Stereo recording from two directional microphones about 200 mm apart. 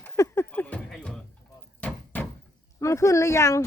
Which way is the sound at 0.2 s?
10° left (ahead or behind).